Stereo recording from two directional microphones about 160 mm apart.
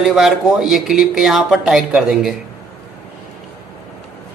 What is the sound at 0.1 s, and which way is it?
Speech, centre (ahead or behind).